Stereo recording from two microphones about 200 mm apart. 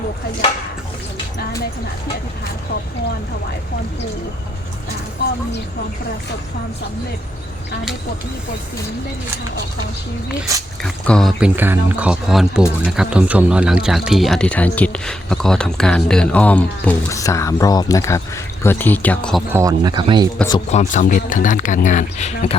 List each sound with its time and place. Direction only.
10.8 s speech: 5° left (ahead or behind)
19.5 s speech: 15° right (ahead or behind)
20.7 s speech: 35° left (ahead or behind)